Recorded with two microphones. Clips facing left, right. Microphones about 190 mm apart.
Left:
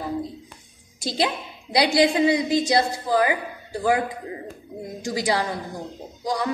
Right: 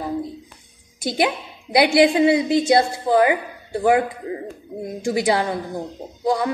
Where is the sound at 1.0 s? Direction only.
20° right (ahead or behind).